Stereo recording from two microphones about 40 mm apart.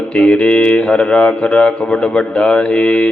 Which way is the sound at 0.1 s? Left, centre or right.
Left.